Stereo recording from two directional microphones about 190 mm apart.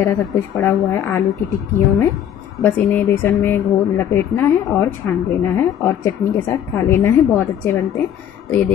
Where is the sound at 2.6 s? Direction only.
10° left (ahead or behind).